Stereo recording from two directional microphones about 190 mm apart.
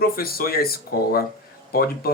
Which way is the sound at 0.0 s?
50° left (ahead or behind).